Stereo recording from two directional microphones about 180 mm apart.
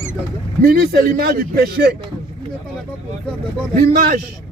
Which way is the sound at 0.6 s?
60° right (ahead or behind).